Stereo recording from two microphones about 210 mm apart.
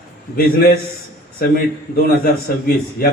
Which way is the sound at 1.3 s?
45° left (ahead or behind).